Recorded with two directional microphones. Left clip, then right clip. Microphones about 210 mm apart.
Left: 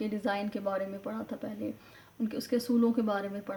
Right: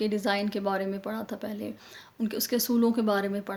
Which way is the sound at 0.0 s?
45° right (ahead or behind).